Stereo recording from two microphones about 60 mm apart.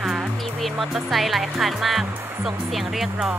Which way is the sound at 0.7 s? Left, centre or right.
Centre.